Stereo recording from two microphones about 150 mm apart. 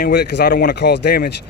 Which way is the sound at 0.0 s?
90° left.